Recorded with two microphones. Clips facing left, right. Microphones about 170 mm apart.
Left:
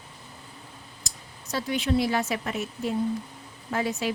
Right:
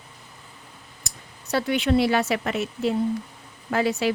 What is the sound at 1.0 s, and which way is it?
Speech, 65° right (ahead or behind).